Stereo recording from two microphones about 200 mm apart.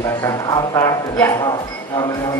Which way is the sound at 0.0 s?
15° left (ahead or behind).